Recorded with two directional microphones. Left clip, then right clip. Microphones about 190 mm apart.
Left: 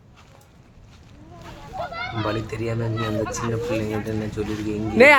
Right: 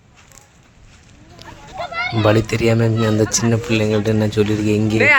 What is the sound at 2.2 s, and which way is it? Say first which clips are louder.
Speech: right 14 dB; 45° right (ahead or behind).